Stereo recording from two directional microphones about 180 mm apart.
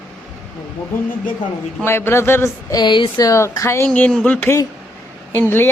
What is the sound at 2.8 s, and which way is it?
Speech, 25° left (ahead or behind).